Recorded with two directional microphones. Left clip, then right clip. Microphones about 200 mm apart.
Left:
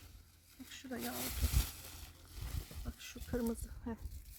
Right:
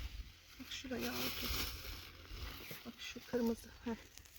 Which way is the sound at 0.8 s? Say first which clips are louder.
Right 1 dB; 5° left (ahead or behind).